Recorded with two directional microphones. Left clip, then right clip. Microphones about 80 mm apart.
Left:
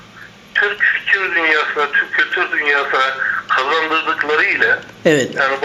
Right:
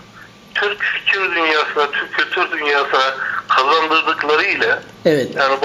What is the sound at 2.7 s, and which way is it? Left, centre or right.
Speech, right.